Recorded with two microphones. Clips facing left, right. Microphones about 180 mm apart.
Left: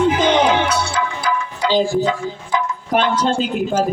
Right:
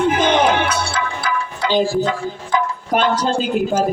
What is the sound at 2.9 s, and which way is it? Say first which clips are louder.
Speech: even; centre (ahead or behind).